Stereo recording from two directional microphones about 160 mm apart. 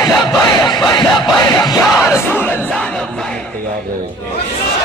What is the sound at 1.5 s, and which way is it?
Music, 20° left (ahead or behind).